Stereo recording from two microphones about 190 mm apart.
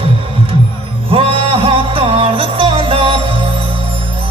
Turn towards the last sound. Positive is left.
turn(degrees=-30)  # may be behind; listen again after turning